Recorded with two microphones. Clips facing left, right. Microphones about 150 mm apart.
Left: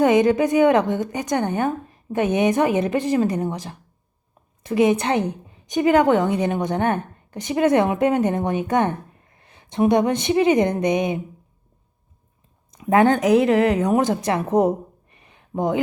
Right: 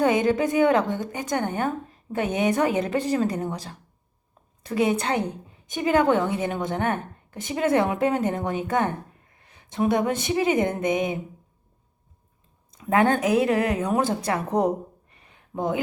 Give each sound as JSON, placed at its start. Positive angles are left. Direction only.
{"t": 0.0, "sound": "a woman's voice", "side_deg": 15}
{"t": 12.7, "sound": "a woman's voice", "side_deg": 20}
{"t": 15.1, "sound": "a sound", "side_deg": 20}